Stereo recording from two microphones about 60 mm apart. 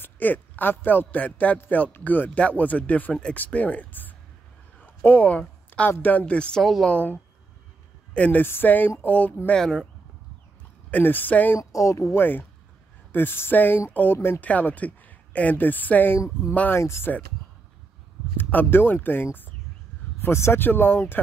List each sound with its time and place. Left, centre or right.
0.0 s speech: left
4.8 s a sound: left
5.9 s speech: left
6.6 s speech: centre
6.9 s speech: left
8.4 s speech: left
9.5 s speech: centre
10.9 s speech: left
11.7 s speech: left
12.1 s speech: left
14.4 s speech: left
16.7 s speech: left
18.4 s speech: left
20.2 s speech: left